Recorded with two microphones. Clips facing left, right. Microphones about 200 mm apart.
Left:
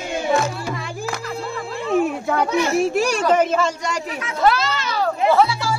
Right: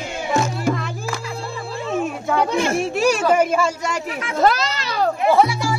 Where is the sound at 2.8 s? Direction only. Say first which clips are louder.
Even; centre (ahead or behind).